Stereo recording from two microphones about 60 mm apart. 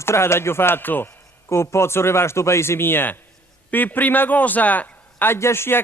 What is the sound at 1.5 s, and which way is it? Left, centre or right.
A man's voice, left.